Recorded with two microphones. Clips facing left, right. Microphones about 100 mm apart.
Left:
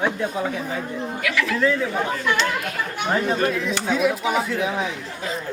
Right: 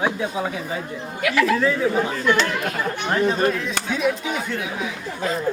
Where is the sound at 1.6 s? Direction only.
5° right (ahead or behind).